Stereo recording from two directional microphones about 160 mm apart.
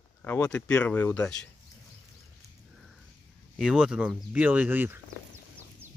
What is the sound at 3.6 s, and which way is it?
Speech, 5° right (ahead or behind).